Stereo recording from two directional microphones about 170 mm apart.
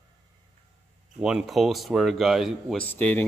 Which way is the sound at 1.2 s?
Centre (ahead or behind).